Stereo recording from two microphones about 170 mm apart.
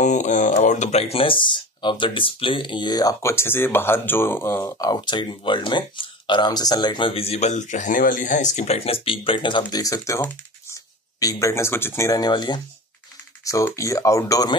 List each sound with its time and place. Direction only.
0.0 s speech: 45° left (ahead or behind); by 14.5 s 20° left (ahead or behind)